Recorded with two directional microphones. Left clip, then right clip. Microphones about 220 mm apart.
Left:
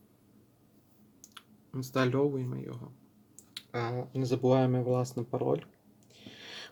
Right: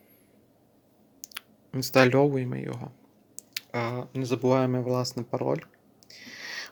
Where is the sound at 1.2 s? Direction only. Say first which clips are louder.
Right 11 dB; 25° right (ahead or behind).